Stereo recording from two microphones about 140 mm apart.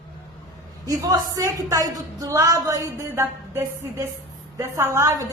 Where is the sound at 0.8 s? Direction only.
25° right (ahead or behind).